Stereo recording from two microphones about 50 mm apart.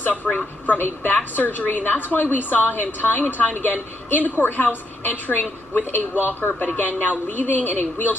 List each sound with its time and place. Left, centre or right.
0.0 s a woman's voice: left